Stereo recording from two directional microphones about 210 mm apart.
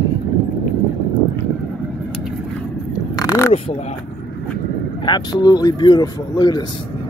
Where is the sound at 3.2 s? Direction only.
15° left (ahead or behind).